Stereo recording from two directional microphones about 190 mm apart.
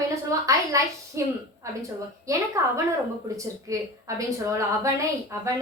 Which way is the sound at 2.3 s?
15° right (ahead or behind).